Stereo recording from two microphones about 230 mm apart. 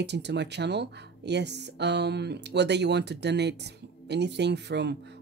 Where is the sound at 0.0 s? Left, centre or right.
Right.